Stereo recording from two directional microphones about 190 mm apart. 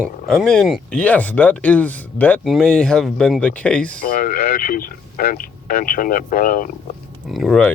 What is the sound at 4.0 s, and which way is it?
Speech, 45° left (ahead or behind).